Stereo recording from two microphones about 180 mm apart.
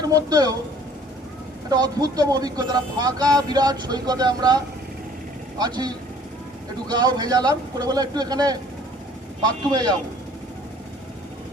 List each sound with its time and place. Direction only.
0.0 s speech: 20° right (ahead or behind)
1.7 s speech: 20° right (ahead or behind)